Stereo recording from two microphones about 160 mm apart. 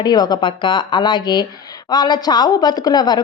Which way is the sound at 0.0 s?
25° left (ahead or behind).